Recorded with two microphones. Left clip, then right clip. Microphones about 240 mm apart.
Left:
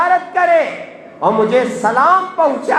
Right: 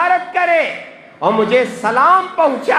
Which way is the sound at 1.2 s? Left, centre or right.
Right.